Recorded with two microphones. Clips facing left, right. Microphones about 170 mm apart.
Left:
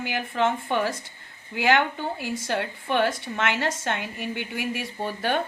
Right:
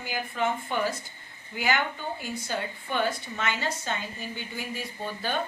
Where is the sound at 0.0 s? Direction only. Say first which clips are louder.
Left 4 dB; 80° left.